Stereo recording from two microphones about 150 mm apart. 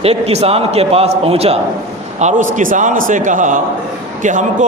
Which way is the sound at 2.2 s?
55° right (ahead or behind).